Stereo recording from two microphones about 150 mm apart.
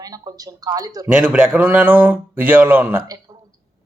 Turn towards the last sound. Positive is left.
turn(degrees=-25)  # may be behind; listen again after turning